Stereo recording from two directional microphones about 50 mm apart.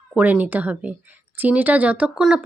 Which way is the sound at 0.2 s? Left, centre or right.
Right.